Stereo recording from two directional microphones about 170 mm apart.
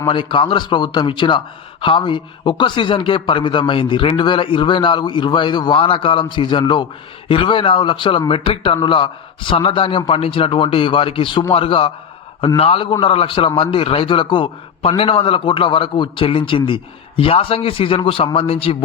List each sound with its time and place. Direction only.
0.1 s a man's voice: 30° left (ahead or behind)